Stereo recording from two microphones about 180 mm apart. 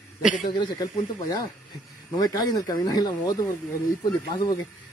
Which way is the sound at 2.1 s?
20° left (ahead or behind).